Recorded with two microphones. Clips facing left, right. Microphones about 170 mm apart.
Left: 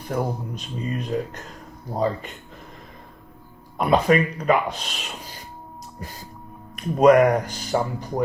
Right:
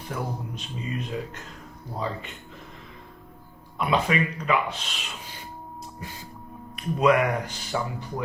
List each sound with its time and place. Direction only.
0.1 s speech: 40° left (ahead or behind)
3.8 s speech: 40° left (ahead or behind)